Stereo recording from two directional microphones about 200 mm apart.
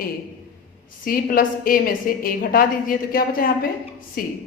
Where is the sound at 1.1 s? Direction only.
45° left (ahead or behind).